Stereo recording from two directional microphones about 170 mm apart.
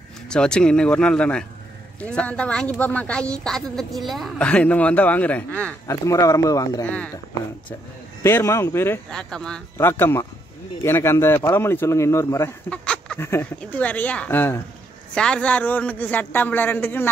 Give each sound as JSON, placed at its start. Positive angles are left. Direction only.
{"t": 0.3, "sound": "speech", "side_deg": 5}
{"t": 8.2, "sound": "speech", "side_deg": 15}